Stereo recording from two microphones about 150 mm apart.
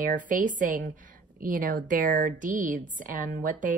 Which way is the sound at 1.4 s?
70° right (ahead or behind).